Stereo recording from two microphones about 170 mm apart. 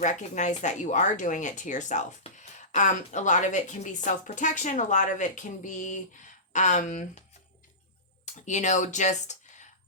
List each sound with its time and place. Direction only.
0.0 s speech: 45° left (ahead or behind)